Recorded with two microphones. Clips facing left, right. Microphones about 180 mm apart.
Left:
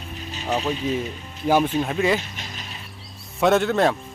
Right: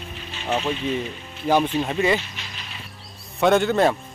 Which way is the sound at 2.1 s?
45° left (ahead or behind).